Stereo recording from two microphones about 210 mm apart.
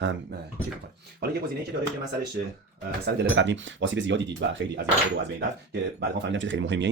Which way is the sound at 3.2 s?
60° right (ahead or behind).